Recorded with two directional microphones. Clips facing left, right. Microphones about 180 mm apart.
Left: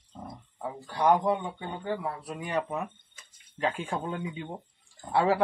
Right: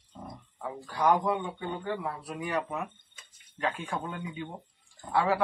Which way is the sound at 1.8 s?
25° left (ahead or behind).